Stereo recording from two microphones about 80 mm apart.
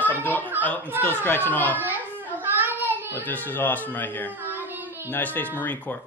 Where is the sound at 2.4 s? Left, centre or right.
Right.